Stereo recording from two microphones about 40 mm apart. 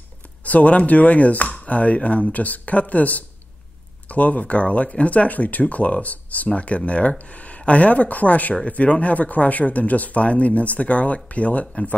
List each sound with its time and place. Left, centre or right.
0.4 s speech: left